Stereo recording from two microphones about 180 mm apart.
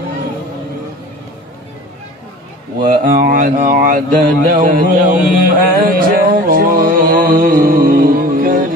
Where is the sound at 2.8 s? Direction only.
50° right (ahead or behind).